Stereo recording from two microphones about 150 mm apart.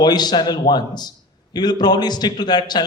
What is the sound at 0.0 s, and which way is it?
A man's voice, 30° left (ahead or behind).